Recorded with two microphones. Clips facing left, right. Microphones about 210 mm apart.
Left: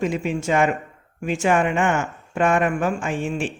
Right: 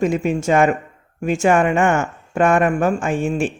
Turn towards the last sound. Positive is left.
turn(degrees=-45)  # may be behind; listen again after turning